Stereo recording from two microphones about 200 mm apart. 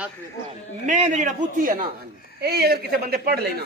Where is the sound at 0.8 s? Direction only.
35° right (ahead or behind).